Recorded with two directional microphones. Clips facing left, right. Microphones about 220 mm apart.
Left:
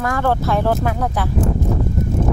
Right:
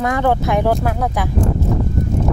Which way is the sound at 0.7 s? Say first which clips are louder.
Right 1 dB; 5° right (ahead or behind).